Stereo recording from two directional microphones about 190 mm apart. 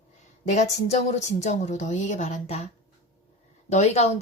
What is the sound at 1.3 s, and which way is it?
A woman's voice, 35° left (ahead or behind).